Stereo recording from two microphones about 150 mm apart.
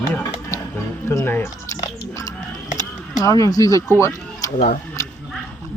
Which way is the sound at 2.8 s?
25° left (ahead or behind).